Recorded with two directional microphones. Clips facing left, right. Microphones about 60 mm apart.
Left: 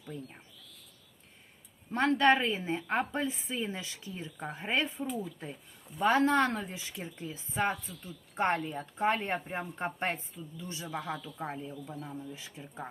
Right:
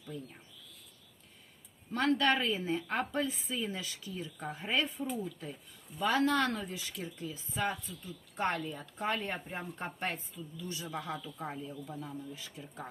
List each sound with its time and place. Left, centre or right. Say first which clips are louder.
0.1 s speech: even; left
1.9 s speech: left 4 dB; left